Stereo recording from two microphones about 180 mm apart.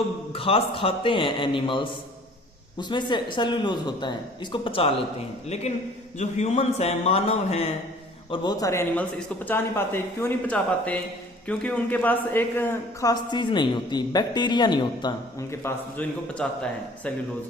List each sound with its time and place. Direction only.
0.3 s a man's voice: 30° left (ahead or behind)
8.3 s a man's voice: 20° left (ahead or behind)